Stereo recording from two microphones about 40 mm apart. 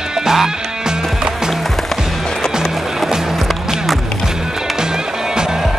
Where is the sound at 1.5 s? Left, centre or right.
Centre.